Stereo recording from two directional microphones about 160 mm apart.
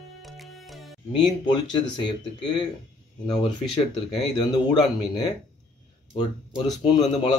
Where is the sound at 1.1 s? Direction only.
30° left (ahead or behind).